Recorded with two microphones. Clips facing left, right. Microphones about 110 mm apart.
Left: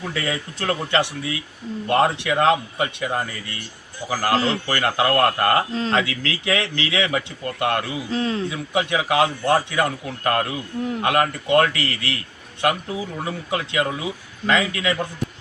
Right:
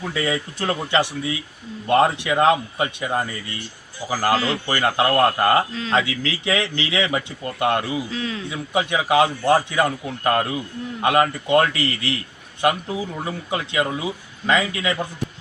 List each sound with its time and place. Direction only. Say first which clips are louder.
0.0 s speech: right 2 dB; 10° right (ahead or behind)
8.1 s a man's voice: left 5 dB; 35° left (ahead or behind)
8.4 s speech: even; 5° right (ahead or behind)